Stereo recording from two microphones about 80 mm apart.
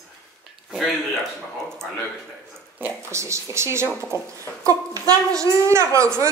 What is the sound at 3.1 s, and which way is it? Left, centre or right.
A woman's voice, right.